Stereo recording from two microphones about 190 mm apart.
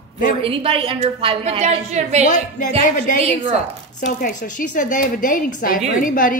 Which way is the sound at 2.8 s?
45° left (ahead or behind).